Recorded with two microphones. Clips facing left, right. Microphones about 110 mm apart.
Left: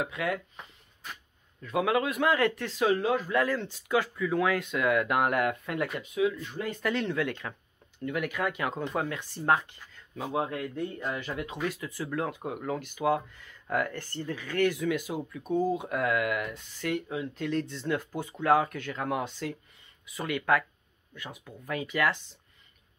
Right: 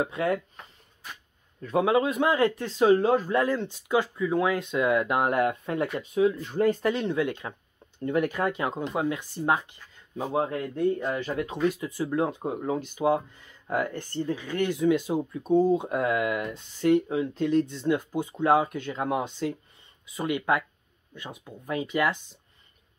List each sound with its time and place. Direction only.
0.0 s speech: 30° right (ahead or behind)
1.6 s speech: 30° right (ahead or behind)
6.8 s speech: 20° right (ahead or behind)
8.0 s speech: 30° right (ahead or behind)
8.6 s speech: 20° right (ahead or behind)
10.2 s speech: 30° right (ahead or behind)
17.5 s speech: 20° right (ahead or behind)